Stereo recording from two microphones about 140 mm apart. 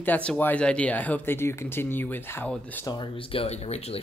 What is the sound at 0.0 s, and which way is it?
Speech, 10° left (ahead or behind).